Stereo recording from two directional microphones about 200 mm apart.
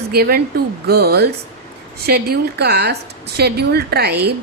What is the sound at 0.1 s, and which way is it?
A woman's voice, 50° right (ahead or behind).